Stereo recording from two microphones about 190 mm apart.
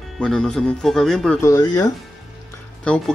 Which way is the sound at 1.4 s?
15° left (ahead or behind).